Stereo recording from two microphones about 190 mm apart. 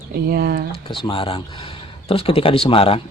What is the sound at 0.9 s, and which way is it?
A man's voice, 25° left (ahead or behind).